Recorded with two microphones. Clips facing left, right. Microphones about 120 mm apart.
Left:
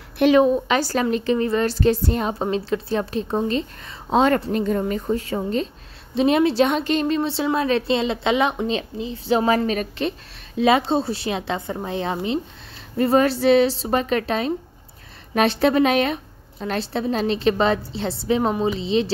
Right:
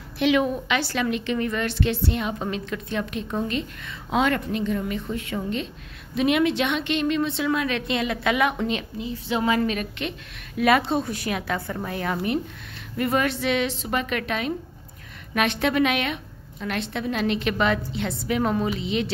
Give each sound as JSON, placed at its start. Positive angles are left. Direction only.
{"t": 0.2, "sound": "a woman's voice", "side_deg": 40}